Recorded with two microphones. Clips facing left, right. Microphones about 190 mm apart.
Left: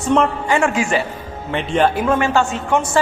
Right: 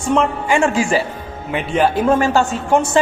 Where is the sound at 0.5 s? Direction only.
30° right (ahead or behind).